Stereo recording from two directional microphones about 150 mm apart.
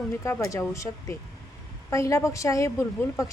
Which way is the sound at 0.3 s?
20° left (ahead or behind).